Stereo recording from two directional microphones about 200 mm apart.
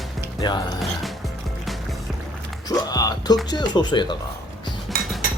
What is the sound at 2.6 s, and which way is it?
Music, 20° left (ahead or behind).